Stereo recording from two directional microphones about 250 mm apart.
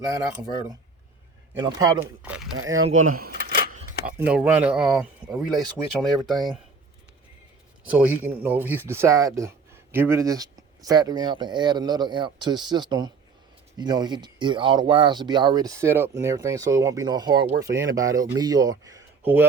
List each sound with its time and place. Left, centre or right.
1.6 s speech: centre
2.9 s a sound: right
4.3 s speech: centre
7.9 s speech: centre